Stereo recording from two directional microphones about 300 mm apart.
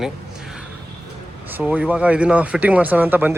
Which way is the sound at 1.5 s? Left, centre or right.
Centre.